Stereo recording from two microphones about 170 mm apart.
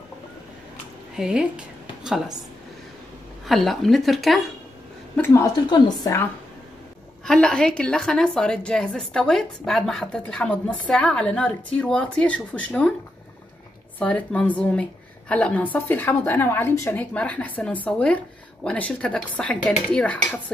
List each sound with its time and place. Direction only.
1.1 s a woman's voice: 5° right (ahead or behind)
3.4 s a woman's voice: centre (ahead or behind)
5.1 s a woman's voice: 15° left (ahead or behind)
7.2 s a woman's voice: 5° left (ahead or behind)
13.9 s a woman's voice: 10° left (ahead or behind)